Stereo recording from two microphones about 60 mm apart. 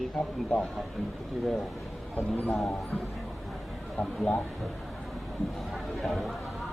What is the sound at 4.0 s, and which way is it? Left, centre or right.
Speech, centre.